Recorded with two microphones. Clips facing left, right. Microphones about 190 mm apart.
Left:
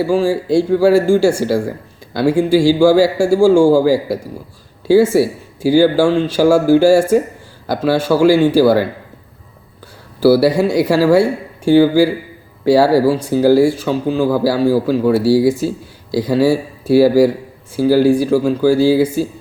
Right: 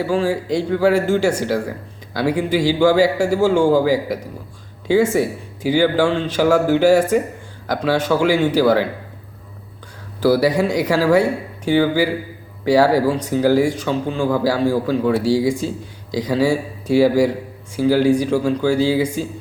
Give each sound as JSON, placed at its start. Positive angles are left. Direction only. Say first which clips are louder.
{"t": 0.0, "sound": "speech", "louder": "left 4 dB", "side_deg": 10}
{"t": 2.2, "sound": "speech", "louder": "left 6 dB", "side_deg": 25}
{"t": 2.5, "sound": "speech", "louder": "left 5 dB", "side_deg": 10}
{"t": 10.2, "sound": "speech", "louder": "left 4 dB", "side_deg": 10}